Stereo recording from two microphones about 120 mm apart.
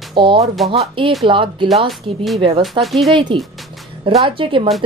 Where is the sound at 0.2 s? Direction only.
40° right (ahead or behind).